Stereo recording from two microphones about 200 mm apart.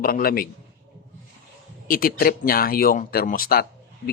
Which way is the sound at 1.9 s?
45° left (ahead or behind).